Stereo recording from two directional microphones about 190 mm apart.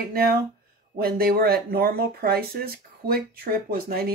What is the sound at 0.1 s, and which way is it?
Speech, 55° right (ahead or behind).